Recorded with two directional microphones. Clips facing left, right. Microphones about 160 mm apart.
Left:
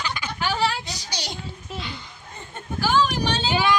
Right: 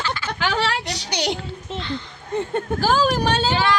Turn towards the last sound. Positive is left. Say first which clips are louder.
# right 1 dB
turn(degrees=10)  # may be behind; listen again after turning